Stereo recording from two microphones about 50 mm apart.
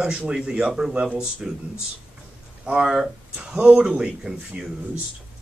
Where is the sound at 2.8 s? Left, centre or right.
Centre.